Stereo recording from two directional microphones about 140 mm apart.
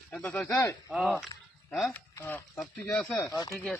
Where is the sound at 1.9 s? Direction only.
15° left (ahead or behind).